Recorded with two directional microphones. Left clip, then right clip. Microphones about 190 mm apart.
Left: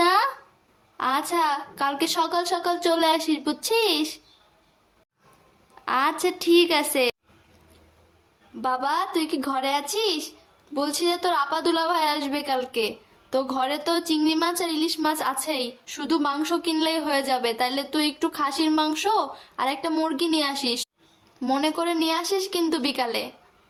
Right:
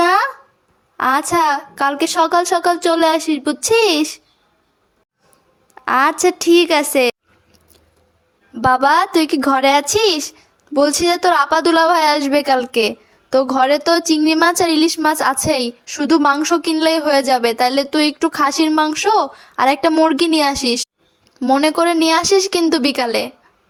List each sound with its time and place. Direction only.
0.9 s a woman's voice: 35° right (ahead or behind)
5.8 s a woman's voice: 40° right (ahead or behind)
8.6 s a woman's voice: 45° right (ahead or behind)